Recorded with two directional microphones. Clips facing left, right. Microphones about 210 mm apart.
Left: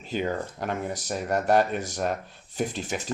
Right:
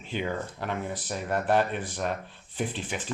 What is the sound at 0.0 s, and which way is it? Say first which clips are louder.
Speech: left 3 dB; 40° left (ahead or behind).